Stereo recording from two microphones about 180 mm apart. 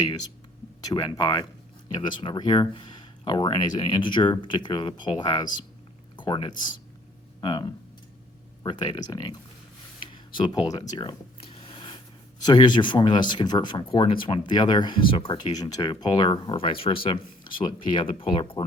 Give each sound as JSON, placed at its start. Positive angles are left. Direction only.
{"t": 0.9, "sound": "speech", "side_deg": 25}